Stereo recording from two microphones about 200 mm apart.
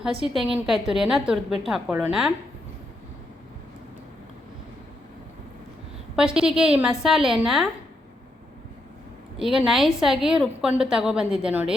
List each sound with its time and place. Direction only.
0.0 s a woman's voice: centre (ahead or behind)
6.1 s a woman's voice: 5° right (ahead or behind)
9.4 s a woman's voice: centre (ahead or behind)